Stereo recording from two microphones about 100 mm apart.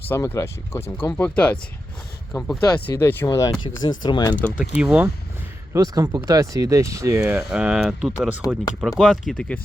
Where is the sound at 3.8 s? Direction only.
45° left (ahead or behind).